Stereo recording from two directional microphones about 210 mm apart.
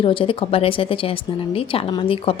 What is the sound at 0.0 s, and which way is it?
A woman's voice, 25° left (ahead or behind).